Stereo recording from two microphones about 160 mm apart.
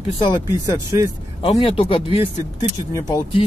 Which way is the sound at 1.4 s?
35° left (ahead or behind).